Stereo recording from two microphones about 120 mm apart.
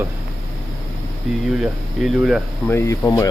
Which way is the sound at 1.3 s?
Centre (ahead or behind).